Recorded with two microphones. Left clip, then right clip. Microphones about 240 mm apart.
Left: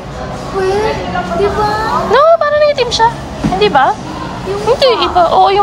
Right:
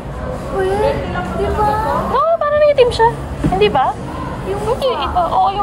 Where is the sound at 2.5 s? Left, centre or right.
Centre.